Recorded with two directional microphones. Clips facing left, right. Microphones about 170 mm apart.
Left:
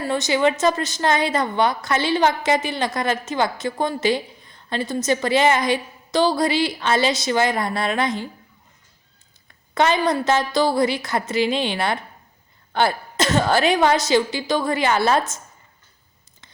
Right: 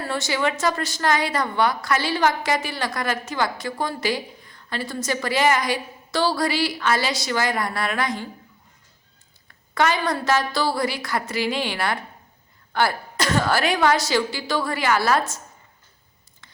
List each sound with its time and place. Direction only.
0.0 s a woman's voice: 20° left (ahead or behind)
9.7 s a woman's voice: 20° left (ahead or behind)